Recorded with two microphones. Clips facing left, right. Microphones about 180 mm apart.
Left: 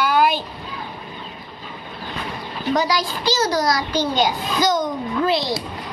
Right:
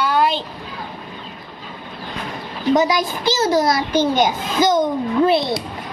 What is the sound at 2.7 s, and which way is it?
A child's voice, 20° right (ahead or behind).